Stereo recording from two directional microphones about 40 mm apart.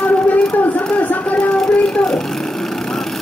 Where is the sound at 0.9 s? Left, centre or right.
Left.